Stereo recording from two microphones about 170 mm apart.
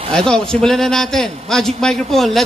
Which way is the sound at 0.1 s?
5° left (ahead or behind).